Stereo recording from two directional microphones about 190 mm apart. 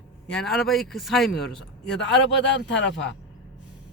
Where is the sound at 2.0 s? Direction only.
70° left (ahead or behind).